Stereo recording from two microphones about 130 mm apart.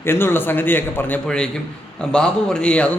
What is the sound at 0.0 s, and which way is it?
A man's voice, 20° left (ahead or behind).